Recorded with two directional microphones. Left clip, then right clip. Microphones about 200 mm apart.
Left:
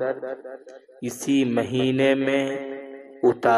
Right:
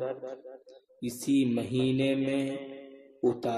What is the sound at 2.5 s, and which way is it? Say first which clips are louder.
Mantra: left 8 dB; 25° left (ahead or behind).